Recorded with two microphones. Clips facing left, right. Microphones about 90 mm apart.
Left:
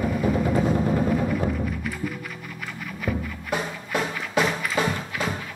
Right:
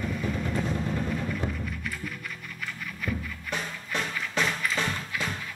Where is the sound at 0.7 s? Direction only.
35° left (ahead or behind).